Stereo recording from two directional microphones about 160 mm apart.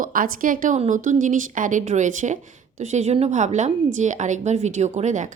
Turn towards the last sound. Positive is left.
turn(degrees=-45)  # may be behind; listen again after turning